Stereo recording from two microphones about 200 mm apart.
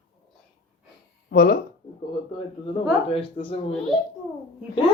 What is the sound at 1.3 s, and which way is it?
Speech, 50° left (ahead or behind).